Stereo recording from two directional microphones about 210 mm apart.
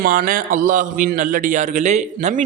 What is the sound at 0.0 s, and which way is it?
A man's voice, 40° right (ahead or behind).